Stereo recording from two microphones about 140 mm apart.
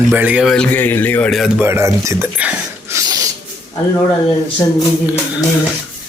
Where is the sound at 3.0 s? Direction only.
25° right (ahead or behind).